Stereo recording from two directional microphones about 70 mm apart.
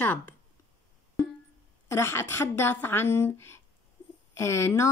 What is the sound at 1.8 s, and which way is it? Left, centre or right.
Speech, left.